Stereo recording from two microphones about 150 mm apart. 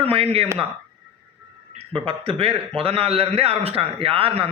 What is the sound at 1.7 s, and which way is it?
A man's voice, 40° right (ahead or behind).